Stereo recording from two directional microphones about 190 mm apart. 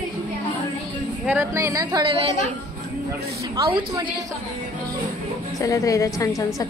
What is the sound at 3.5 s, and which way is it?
Speech, 25° right (ahead or behind).